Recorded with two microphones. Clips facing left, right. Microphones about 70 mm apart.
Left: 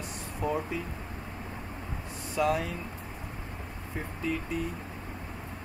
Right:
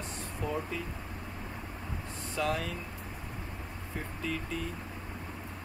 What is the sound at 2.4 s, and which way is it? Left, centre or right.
Speech, centre.